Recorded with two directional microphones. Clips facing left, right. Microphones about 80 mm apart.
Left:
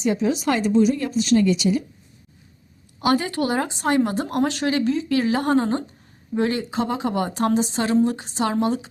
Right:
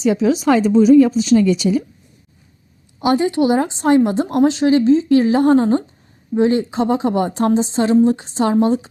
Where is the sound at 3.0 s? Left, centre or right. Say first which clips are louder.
Right 5 dB; right.